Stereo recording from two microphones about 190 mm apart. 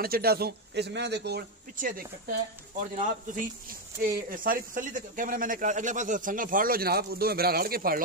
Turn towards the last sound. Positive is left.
turn(degrees=-50)  # may be behind; listen again after turning